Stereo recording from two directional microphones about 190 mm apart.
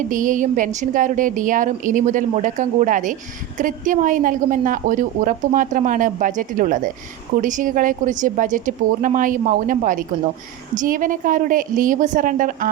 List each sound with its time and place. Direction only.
0.1 s a woman's voice: 45° right (ahead or behind)